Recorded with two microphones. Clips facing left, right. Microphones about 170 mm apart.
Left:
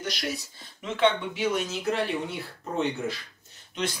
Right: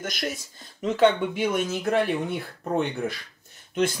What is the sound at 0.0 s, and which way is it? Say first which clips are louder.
Speech: right 1 dB; 50° right (ahead or behind).